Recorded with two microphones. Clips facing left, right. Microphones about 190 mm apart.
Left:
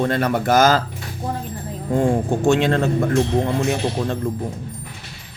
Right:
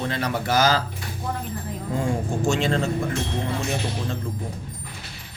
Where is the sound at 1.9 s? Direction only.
55° left (ahead or behind).